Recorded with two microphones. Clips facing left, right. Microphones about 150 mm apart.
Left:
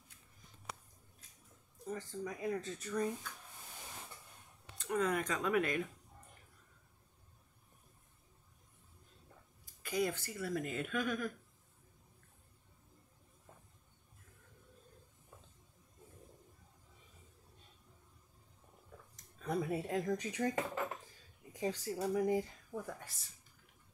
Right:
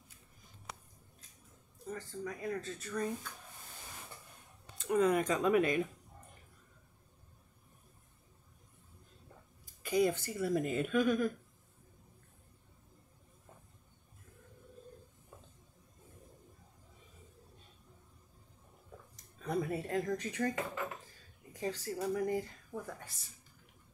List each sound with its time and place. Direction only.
1.9 s speech: 15° left (ahead or behind)
4.7 s a woman's voice: 15° right (ahead or behind)
9.8 s a woman's voice: 20° right (ahead or behind)
19.1 s speech: centre (ahead or behind)
21.5 s speech: 15° left (ahead or behind)
21.8 s speech: centre (ahead or behind)